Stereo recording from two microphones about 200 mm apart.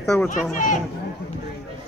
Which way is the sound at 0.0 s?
5° left (ahead or behind).